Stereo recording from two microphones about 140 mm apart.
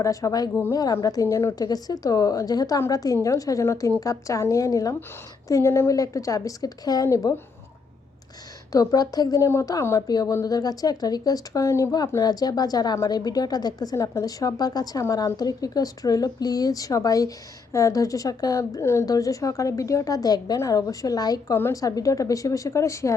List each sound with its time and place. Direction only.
0.0 s speech: 25° left (ahead or behind)
8.7 s speech: 25° left (ahead or behind)